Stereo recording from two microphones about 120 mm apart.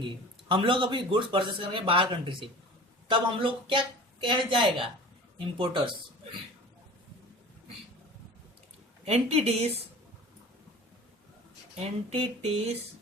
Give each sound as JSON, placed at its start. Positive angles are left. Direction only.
{"t": 0.0, "sound": "a man's voice", "side_deg": -45}
{"t": 9.0, "sound": "a woman's voice", "side_deg": -60}
{"t": 12.1, "sound": "a woman's voice", "side_deg": -55}